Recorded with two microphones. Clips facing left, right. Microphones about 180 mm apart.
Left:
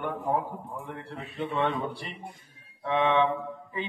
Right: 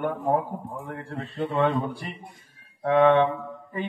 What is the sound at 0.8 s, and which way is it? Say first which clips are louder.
A man's voice: right 4 dB; 45° right (ahead or behind).